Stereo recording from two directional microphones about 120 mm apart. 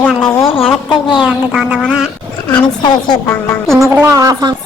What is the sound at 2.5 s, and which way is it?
Speech, 10° left (ahead or behind).